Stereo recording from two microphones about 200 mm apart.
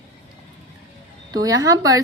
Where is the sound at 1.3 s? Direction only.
15° right (ahead or behind).